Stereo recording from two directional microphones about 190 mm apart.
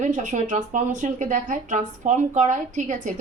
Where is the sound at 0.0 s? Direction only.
40° right (ahead or behind).